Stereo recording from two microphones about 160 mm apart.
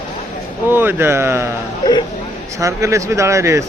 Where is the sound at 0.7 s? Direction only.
10° right (ahead or behind).